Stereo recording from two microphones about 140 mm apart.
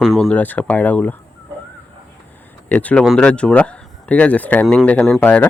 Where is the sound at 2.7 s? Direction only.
10° left (ahead or behind).